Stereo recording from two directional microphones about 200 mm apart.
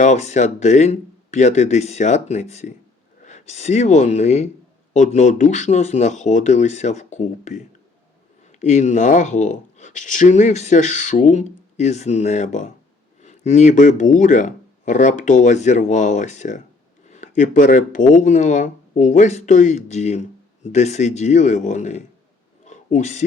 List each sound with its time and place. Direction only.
0.0 s speech: 35° left (ahead or behind)
8.6 s speech: 35° left (ahead or behind)
22.6 s a sound: 35° left (ahead or behind)